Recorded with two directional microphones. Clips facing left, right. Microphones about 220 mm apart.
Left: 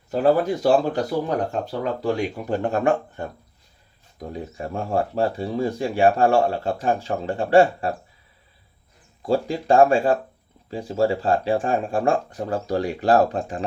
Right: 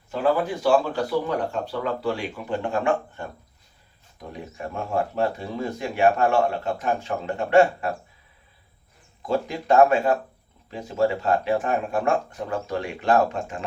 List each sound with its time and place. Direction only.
0.1 s speech: 40° left (ahead or behind)
4.3 s speech: 35° left (ahead or behind)
9.2 s speech: 30° left (ahead or behind)